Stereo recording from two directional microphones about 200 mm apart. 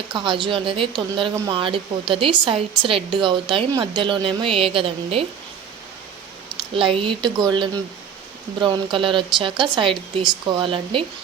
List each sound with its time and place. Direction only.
0.1 s speech: 25° right (ahead or behind)
6.7 s speech: 25° right (ahead or behind)